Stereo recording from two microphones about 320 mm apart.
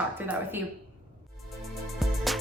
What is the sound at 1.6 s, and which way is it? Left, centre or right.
Music, centre.